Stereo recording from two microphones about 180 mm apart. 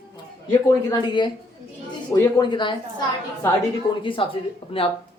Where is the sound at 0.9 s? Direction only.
25° left (ahead or behind).